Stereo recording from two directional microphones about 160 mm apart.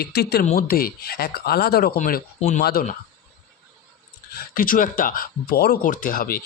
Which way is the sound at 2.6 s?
75° left (ahead or behind).